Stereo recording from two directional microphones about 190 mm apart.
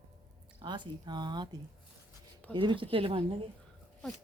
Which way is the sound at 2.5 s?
25° right (ahead or behind).